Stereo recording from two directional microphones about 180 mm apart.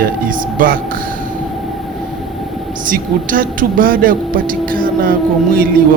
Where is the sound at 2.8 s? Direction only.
50° right (ahead or behind).